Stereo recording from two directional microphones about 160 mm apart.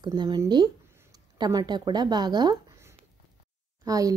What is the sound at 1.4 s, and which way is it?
A woman's voice, 25° right (ahead or behind).